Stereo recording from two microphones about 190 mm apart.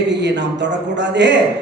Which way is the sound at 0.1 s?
65° right (ahead or behind).